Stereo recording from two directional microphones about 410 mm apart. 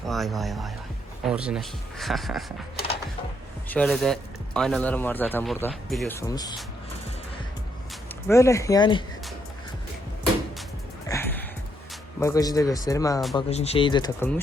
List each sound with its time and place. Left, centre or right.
0.1 s speech: centre
2.7 s music: left
3.7 s speech: centre
8.3 s speech: centre
11.1 s music: centre
12.2 s speech: centre